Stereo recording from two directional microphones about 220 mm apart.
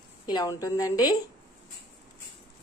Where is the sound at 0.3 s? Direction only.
15° left (ahead or behind).